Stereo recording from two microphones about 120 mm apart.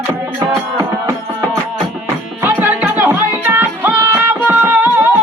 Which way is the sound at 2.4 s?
15° right (ahead or behind).